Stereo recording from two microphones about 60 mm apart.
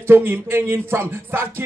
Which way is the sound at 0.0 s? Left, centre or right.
Right.